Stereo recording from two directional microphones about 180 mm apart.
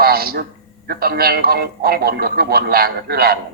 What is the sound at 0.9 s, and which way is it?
Speech, 60° right (ahead or behind).